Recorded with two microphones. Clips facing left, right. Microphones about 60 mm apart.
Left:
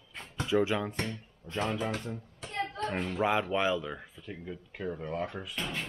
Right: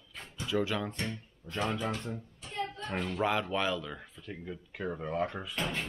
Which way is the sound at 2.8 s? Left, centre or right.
Left.